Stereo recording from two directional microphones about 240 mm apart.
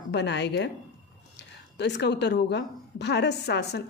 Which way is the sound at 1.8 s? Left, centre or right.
Left.